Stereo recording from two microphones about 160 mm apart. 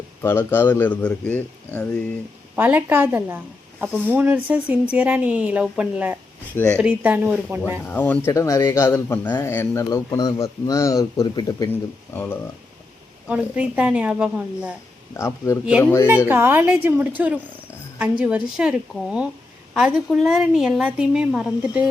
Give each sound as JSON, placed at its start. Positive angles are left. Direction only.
{"t": 0.2, "sound": "speech", "side_deg": 15}
{"t": 2.6, "sound": "speech", "side_deg": -10}
{"t": 7.9, "sound": "speech", "side_deg": 10}
{"t": 12.1, "sound": "speech", "side_deg": 10}
{"t": 13.2, "sound": "speech", "side_deg": -10}
{"t": 15.1, "sound": "speech", "side_deg": 15}
{"t": 16.2, "sound": "a woman's voice", "side_deg": -15}